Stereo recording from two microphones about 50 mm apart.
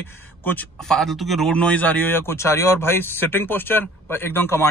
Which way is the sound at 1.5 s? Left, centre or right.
Left.